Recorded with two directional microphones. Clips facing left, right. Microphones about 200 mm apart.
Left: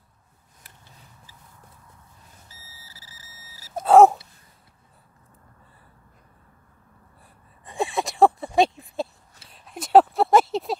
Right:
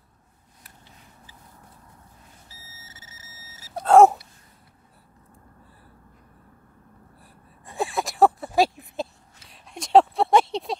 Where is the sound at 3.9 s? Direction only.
Centre (ahead or behind).